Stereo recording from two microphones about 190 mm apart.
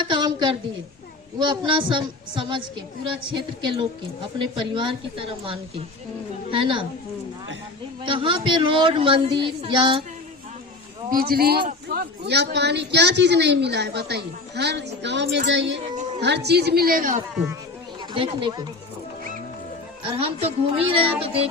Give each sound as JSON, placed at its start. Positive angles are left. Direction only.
{"t": 0.0, "sound": "a sound", "side_deg": -25}
{"t": 1.4, "sound": "a woman's voice", "side_deg": -25}
{"t": 8.0, "sound": "a woman's voice", "side_deg": -25}
{"t": 11.1, "sound": "a man's voice", "side_deg": -50}
{"t": 18.1, "sound": "a woman's voice", "side_deg": -25}
{"t": 20.1, "sound": "a woman's voice", "side_deg": -30}